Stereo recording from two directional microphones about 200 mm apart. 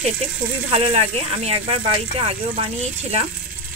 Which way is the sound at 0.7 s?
30° right (ahead or behind).